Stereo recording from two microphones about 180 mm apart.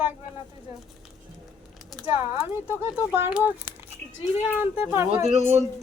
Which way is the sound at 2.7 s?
15° right (ahead or behind).